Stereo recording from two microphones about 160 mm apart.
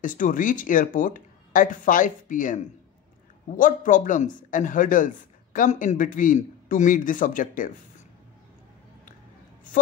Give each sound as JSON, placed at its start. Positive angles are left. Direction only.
{"t": 0.0, "sound": "speech", "side_deg": 55}